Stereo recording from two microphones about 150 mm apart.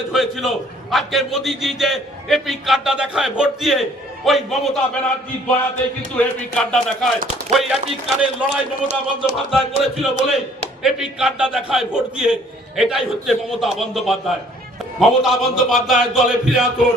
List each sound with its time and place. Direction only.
0.1 s a man's voice: centre (ahead or behind)